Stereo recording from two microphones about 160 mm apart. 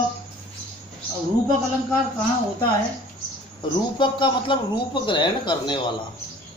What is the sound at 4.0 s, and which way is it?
Speech, 30° left (ahead or behind).